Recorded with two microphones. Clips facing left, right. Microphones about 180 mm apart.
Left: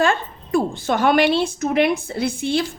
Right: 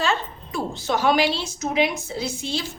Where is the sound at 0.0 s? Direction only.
50° left (ahead or behind).